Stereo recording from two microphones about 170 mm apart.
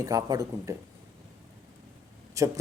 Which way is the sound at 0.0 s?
20° right (ahead or behind).